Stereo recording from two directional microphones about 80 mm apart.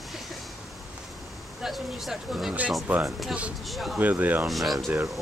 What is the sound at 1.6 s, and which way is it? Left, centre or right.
Speech, centre.